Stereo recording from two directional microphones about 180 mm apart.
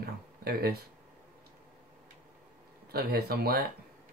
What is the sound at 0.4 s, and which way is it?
Speech, 60° right (ahead or behind).